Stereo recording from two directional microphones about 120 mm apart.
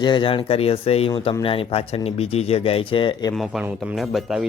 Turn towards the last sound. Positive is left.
turn(degrees=0)  # may be behind; listen again after turning